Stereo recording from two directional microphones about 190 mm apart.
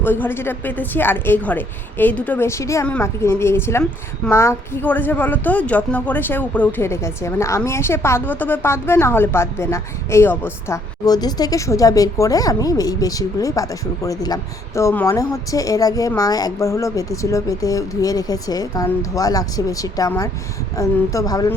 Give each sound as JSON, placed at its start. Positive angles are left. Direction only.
{"t": 0.0, "sound": "a woman's voice", "side_deg": 10}